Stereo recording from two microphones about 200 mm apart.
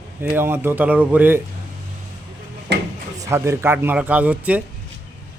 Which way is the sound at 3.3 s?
15° right (ahead or behind).